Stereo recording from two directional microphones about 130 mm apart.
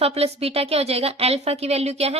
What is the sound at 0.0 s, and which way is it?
A woman's voice, 50° right (ahead or behind).